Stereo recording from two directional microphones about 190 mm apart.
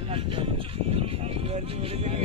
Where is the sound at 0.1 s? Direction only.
30° right (ahead or behind).